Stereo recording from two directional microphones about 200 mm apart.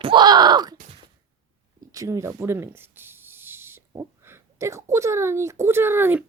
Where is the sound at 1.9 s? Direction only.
15° right (ahead or behind).